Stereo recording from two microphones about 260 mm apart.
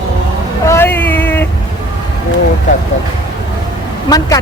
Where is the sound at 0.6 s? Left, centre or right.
Centre.